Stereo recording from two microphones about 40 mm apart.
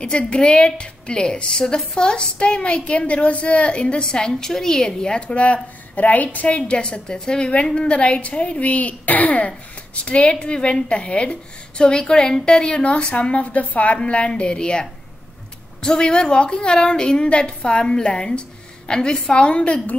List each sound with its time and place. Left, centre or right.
0.0 s a woman's voice: left
5.4 s a woman's voice: left
13.9 s a woman's voice: left
17.9 s a woman's voice: centre
19.4 s a woman's voice: left